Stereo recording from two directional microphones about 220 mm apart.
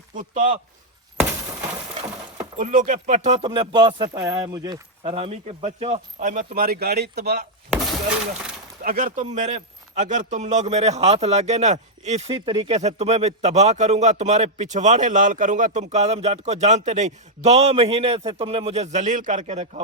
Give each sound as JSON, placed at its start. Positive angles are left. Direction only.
{"t": 0.1, "sound": "speech", "side_deg": -35}
{"t": 2.6, "sound": "speech", "side_deg": -35}
{"t": 8.8, "sound": "speech", "side_deg": -40}